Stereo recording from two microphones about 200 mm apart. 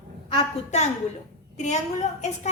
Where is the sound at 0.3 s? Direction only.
35° left (ahead or behind).